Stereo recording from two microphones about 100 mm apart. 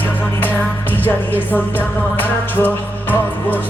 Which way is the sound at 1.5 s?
20° left (ahead or behind).